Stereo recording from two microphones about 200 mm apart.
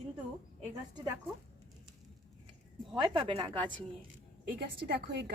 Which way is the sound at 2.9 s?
20° right (ahead or behind).